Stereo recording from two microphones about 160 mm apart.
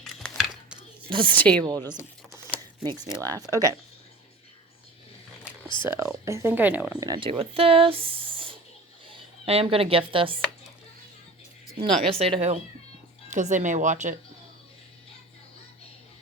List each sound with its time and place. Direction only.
0.0 s a sound: centre (ahead or behind)
1.0 s speech: 30° right (ahead or behind)
1.3 s speech: 10° left (ahead or behind)
3.2 s speech: 20° right (ahead or behind)
3.5 s speech: 20° left (ahead or behind)
5.6 s speech: 30° left (ahead or behind)
5.9 s speech: 15° right (ahead or behind)
7.0 s speech: 30° right (ahead or behind)
11.8 s speech: 40° right (ahead or behind)